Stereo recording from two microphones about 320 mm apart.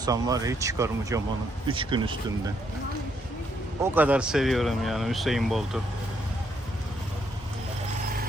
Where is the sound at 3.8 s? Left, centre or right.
Centre.